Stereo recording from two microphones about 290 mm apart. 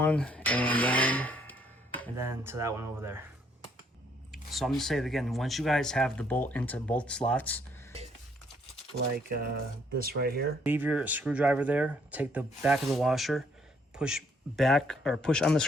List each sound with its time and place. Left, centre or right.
0.0 s a sound: centre
2.1 s speech: centre
4.3 s speech: centre
9.0 s speech: right
10.6 s speech: centre